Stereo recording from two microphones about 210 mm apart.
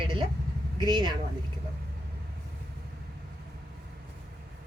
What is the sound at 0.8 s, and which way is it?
Speech, 20° right (ahead or behind).